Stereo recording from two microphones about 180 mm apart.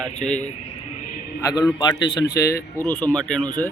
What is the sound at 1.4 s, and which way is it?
A man's voice, 20° left (ahead or behind).